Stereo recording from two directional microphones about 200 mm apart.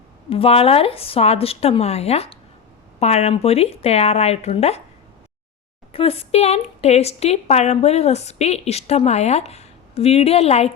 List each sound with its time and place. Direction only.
0.3 s speech: 30° left (ahead or behind)
5.9 s speech: 30° left (ahead or behind)